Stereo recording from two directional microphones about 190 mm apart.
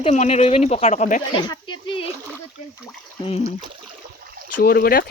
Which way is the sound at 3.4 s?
25° right (ahead or behind).